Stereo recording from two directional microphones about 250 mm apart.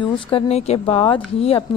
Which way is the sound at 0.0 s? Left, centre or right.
Left.